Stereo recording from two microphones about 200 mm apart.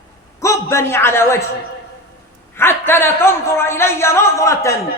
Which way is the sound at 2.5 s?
10° left (ahead or behind).